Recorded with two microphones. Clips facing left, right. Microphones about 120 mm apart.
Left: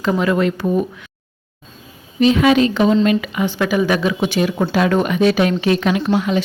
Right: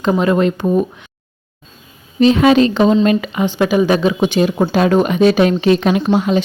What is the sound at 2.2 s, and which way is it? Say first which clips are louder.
Speech: right 3 dB; 35° right (ahead or behind).